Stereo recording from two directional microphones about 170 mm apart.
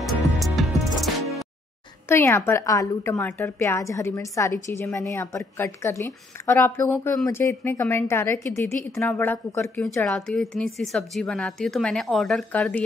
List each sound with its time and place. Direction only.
0.0 s music: centre (ahead or behind)
2.0 s a woman's voice: 15° left (ahead or behind)